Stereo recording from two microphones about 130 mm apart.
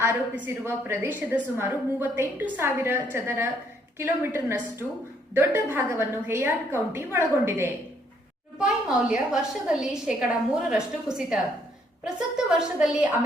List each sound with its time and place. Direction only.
0.0 s a woman's voice: 15° right (ahead or behind)
8.5 s a woman's voice: 5° right (ahead or behind)